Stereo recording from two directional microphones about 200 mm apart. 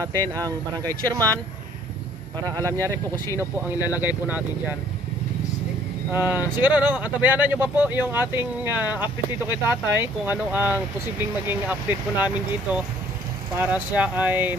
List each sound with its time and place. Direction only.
0.0 s speech: 15° right (ahead or behind)
2.5 s speech: 15° right (ahead or behind)
6.3 s speech: 10° right (ahead or behind)